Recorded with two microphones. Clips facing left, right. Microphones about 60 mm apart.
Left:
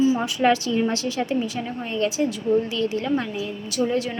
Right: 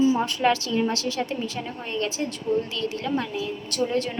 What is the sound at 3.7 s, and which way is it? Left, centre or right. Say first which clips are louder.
Speech: left 3 dB; centre.